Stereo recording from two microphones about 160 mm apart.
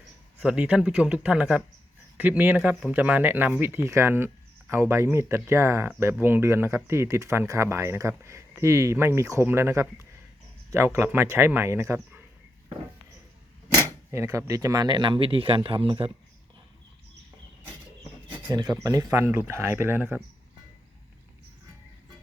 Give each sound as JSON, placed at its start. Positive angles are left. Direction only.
{"t": 0.3, "sound": "speech", "side_deg": -10}
{"t": 14.1, "sound": "speech", "side_deg": -15}
{"t": 18.5, "sound": "speech", "side_deg": -25}